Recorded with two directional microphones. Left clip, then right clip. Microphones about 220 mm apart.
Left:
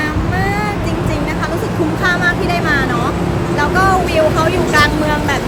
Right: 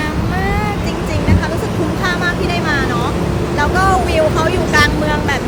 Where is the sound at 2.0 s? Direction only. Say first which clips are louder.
Left 4 dB; 5° right (ahead or behind).